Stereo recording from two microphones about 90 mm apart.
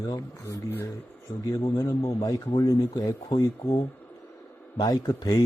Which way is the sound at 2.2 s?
50° left (ahead or behind).